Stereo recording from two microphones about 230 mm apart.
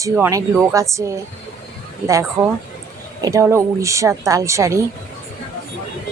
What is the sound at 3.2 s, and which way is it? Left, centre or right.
Speech, centre.